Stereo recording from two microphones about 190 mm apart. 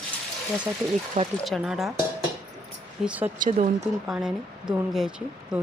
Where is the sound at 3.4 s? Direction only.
40° right (ahead or behind).